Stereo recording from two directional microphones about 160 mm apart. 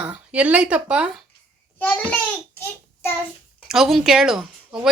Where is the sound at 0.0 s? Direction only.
10° right (ahead or behind).